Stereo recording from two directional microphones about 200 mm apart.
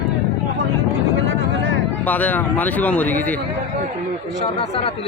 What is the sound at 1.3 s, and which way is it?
Vehicle, 70° right (ahead or behind).